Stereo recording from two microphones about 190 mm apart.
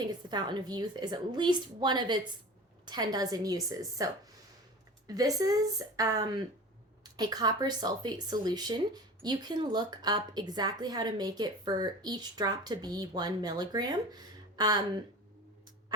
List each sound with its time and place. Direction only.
0.1 s speech: 20° right (ahead or behind)